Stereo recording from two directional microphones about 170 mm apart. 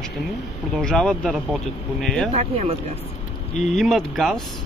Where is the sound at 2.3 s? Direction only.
35° right (ahead or behind).